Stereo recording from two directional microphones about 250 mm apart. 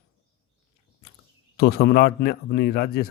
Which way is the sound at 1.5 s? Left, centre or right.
Left.